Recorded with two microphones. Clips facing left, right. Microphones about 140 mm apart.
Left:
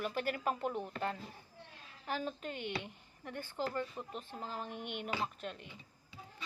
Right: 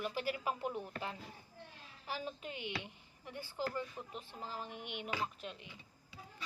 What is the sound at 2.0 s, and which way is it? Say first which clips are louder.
A woman's voice: left 4 dB; 50° left (ahead or behind).